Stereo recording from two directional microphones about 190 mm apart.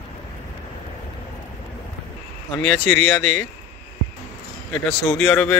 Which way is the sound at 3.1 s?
Centre (ahead or behind).